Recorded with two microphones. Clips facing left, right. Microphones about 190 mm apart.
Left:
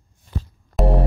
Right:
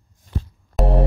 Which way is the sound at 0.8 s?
Centre (ahead or behind).